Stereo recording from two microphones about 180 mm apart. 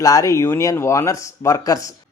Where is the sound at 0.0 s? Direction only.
20° left (ahead or behind).